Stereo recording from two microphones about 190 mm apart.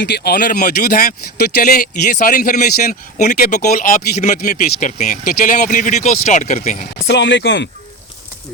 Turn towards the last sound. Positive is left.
turn(degrees=70)  # may be behind; listen again after turning